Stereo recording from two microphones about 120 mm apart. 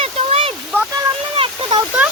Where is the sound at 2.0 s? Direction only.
10° right (ahead or behind).